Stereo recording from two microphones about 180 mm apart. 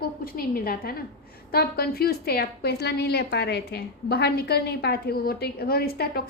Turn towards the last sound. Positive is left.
turn(degrees=60)  # may be behind; listen again after turning